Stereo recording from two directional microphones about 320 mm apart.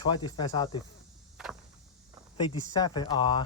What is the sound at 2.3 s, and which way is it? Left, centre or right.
Speech, centre.